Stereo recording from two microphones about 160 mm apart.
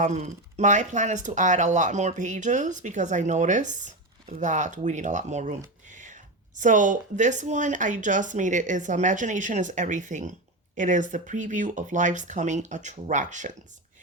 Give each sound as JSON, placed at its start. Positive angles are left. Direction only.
{"t": 0.0, "sound": "speech", "side_deg": -45}